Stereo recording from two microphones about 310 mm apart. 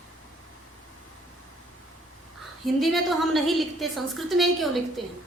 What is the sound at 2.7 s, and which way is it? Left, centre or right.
A woman's voice, centre.